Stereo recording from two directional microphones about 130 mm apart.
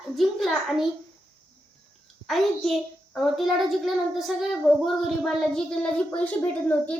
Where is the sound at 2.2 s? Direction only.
Centre (ahead or behind).